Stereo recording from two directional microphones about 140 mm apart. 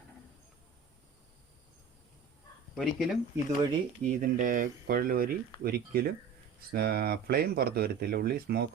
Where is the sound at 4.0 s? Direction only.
70° right (ahead or behind); by 8.5 s 90° right.